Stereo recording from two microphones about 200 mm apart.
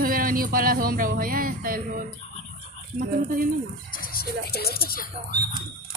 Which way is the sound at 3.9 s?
45° left (ahead or behind).